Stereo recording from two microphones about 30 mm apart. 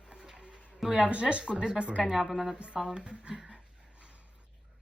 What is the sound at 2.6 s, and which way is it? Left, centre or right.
Speech, right.